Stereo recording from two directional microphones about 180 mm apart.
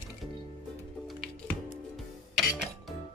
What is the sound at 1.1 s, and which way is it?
Music, centre (ahead or behind).